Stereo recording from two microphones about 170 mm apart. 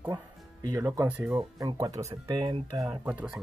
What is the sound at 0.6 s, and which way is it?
Speech, 20° right (ahead or behind).